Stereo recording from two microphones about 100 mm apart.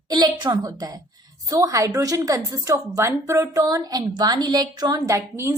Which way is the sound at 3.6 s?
40° right (ahead or behind).